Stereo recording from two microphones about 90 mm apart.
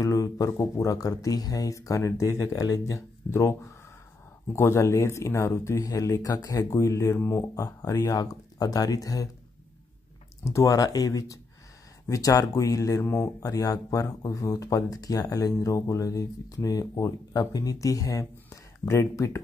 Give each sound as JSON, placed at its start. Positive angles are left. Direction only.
{"t": 0.0, "sound": "speech", "side_deg": 40}
{"t": 4.6, "sound": "speech", "side_deg": 30}
{"t": 10.4, "sound": "speech", "side_deg": 35}